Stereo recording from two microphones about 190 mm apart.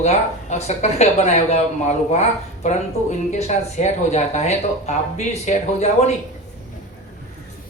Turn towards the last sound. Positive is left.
turn(degrees=35)  # may be behind; listen again after turning